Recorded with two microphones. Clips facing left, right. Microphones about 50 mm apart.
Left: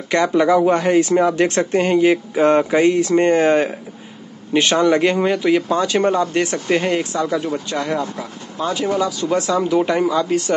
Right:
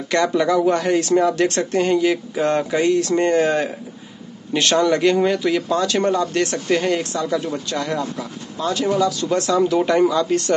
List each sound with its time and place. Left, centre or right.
0.1 s speech: centre
4.6 s speech: centre